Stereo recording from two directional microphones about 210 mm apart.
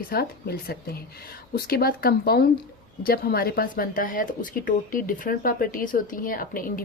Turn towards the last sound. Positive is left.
turn(degrees=40)  # may be behind; listen again after turning